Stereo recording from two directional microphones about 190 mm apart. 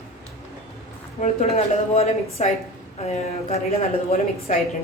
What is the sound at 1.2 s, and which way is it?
A woman's voice, 35° left (ahead or behind).